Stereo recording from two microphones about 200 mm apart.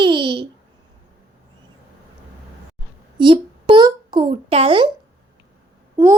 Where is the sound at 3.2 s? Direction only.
25° right (ahead or behind).